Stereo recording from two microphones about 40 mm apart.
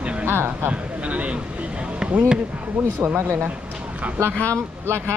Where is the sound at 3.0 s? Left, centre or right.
Right.